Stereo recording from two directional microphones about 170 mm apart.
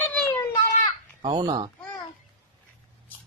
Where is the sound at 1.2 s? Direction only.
30° right (ahead or behind).